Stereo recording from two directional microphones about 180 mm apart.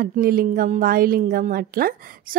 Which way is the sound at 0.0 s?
55° right (ahead or behind).